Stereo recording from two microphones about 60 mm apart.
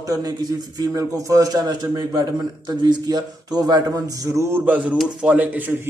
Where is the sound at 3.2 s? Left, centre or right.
Right.